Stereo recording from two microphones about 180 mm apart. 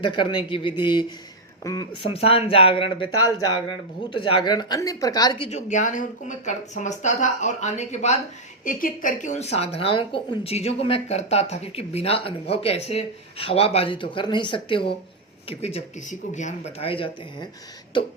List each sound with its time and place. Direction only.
0.0 s speech: 25° left (ahead or behind)
5.5 s speech: 40° left (ahead or behind)